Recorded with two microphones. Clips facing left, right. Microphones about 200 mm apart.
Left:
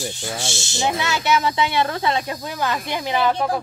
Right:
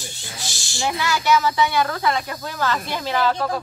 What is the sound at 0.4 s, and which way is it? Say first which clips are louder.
A woman's voice: left 1 dB; 25° left (ahead or behind).